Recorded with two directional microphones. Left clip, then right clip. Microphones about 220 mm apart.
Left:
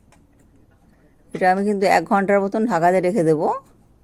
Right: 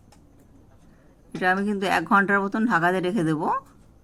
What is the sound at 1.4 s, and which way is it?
Speech, 35° left (ahead or behind).